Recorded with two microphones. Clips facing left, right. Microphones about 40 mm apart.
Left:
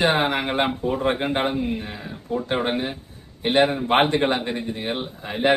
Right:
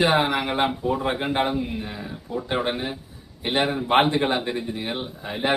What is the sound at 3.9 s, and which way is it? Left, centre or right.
Speech, left.